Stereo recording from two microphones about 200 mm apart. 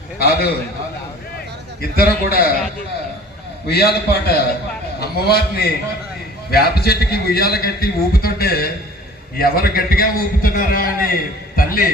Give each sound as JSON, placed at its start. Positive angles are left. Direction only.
{"t": 0.2, "sound": "a man's voice", "side_deg": 50}
{"t": 1.8, "sound": "a man's voice", "side_deg": 50}
{"t": 3.7, "sound": "a man's voice", "side_deg": 50}